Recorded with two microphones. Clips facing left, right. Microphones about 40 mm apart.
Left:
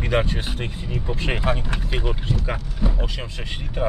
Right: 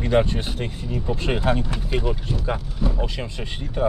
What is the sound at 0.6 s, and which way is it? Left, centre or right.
Speech, left.